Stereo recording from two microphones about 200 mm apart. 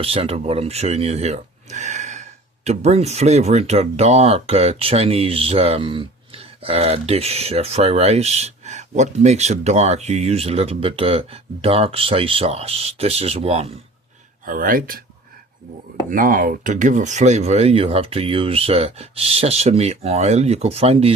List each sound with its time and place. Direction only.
0.0 s speech: 30° right (ahead or behind)
14.4 s speech: 45° right (ahead or behind)
16.0 s speech: 45° right (ahead or behind)